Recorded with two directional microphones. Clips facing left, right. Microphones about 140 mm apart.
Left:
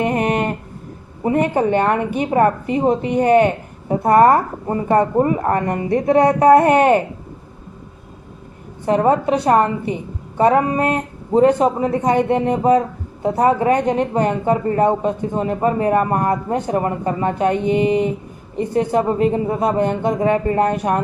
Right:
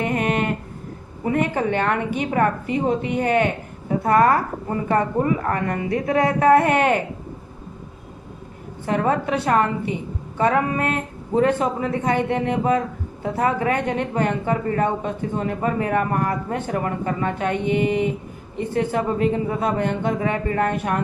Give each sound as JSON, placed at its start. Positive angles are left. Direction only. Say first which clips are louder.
{"t": 0.1, "sound": "a sound", "louder": "left 3 dB", "side_deg": 35}
{"t": 1.2, "sound": "a woman's voice", "louder": "left 5 dB", "side_deg": 35}
{"t": 8.9, "sound": "a woman's voice", "louder": "left 6 dB", "side_deg": 30}